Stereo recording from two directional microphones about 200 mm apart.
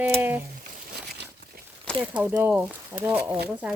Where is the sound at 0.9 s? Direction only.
55° right (ahead or behind).